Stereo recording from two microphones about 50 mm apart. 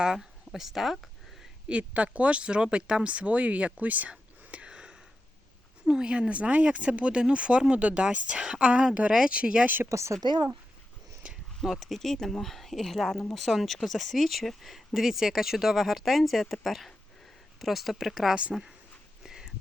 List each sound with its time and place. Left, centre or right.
0.0 s speech: centre
1.6 s speech: right
4.1 s whispering: centre
5.8 s speech: centre
9.8 s speech: right
11.3 s speech: centre
19.2 s a sound: centre